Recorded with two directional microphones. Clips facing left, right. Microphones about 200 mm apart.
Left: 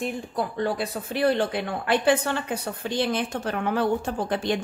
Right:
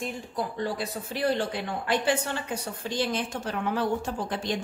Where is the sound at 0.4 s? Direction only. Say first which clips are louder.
Left 4 dB; 60° left (ahead or behind).